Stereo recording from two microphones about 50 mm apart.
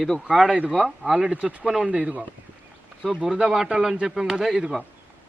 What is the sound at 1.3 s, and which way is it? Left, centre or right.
Speech, right.